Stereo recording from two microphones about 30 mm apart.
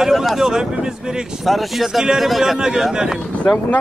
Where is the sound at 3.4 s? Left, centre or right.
Left.